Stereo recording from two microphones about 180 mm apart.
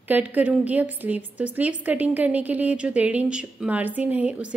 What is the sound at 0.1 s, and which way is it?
A woman's voice, 10° right (ahead or behind).